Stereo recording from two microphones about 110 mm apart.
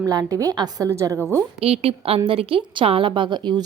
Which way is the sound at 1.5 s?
65° right (ahead or behind).